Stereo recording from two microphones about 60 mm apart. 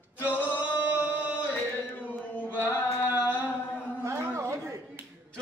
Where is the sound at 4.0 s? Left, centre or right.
Right.